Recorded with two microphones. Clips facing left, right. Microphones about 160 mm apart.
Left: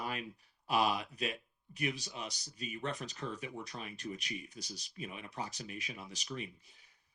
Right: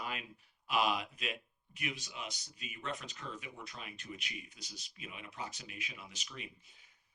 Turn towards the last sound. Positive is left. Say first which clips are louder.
# left 7 dB
turn(degrees=40)  # may be behind; listen again after turning